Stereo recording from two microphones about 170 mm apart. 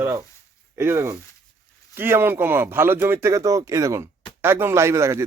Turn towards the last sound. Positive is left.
turn(degrees=-15)  # may be behind; listen again after turning